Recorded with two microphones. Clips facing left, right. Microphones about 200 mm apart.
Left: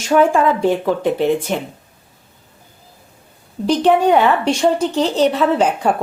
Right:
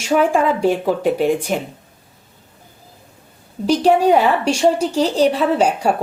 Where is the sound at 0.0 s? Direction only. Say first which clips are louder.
Left 2 dB; 10° right (ahead or behind).